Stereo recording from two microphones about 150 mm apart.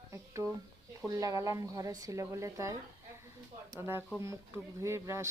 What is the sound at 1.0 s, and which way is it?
Speech, 20° right (ahead or behind).